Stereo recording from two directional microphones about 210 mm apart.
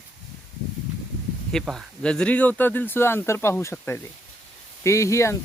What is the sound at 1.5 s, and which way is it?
Speech, centre (ahead or behind).